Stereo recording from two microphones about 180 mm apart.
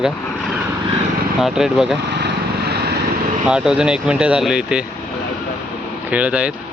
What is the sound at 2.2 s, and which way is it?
Vehicle, 65° right (ahead or behind).